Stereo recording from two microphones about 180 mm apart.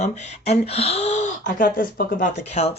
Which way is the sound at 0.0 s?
35° left (ahead or behind).